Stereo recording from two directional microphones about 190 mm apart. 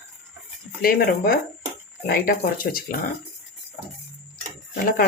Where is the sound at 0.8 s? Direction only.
50° left (ahead or behind).